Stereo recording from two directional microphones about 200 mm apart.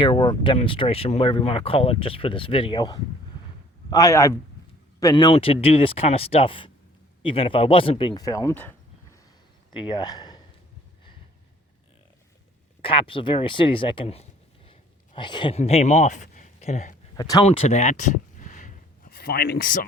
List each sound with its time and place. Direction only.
0.0 s a man's voice: 25° left (ahead or behind)
9.7 s speech: 25° left (ahead or behind)
12.8 s speech: 25° left (ahead or behind)
14.7 s a sound: 25° left (ahead or behind)
17.2 s speech: 20° left (ahead or behind)
17.4 s speech: 35° left (ahead or behind)
18.3 s a sound: 40° left (ahead or behind)